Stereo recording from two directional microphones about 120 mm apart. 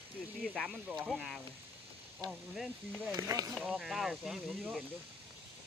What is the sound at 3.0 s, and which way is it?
Speech, 20° right (ahead or behind).